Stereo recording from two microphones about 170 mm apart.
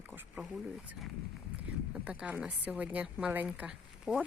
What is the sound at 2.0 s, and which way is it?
Speech, 5° right (ahead or behind).